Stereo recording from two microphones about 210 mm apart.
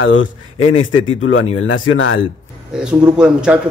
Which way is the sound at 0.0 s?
70° left (ahead or behind).